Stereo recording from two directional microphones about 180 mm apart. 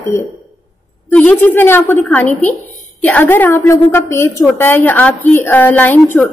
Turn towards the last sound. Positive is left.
turn(degrees=15)  # may be behind; listen again after turning